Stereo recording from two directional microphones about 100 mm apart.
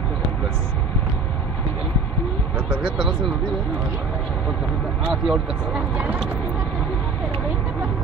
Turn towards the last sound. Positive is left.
turn(degrees=-15)  # may be behind; listen again after turning